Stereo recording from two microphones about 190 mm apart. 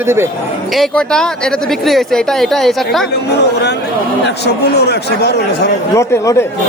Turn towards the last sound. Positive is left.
turn(degrees=15)  # may be behind; listen again after turning